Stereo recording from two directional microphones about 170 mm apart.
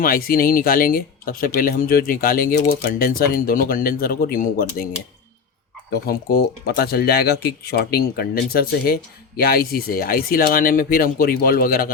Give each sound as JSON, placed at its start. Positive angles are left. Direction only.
{"t": 0.0, "sound": "speech", "side_deg": 60}
{"t": 5.9, "sound": "speech", "side_deg": 60}